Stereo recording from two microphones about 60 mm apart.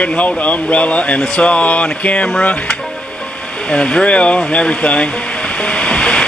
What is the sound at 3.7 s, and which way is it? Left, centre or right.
Speech, centre.